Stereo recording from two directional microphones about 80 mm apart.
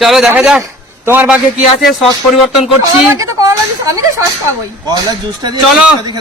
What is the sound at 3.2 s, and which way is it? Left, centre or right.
Speech, right.